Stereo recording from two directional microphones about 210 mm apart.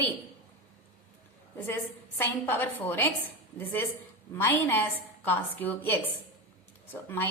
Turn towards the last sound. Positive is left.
turn(degrees=10)  # may be behind; listen again after turning